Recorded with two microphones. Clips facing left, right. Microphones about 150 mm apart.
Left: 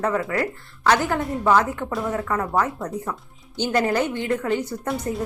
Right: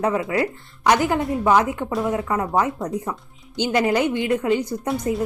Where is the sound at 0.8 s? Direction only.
15° right (ahead or behind).